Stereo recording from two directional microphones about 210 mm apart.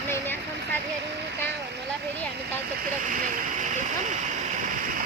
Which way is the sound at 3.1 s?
40° right (ahead or behind).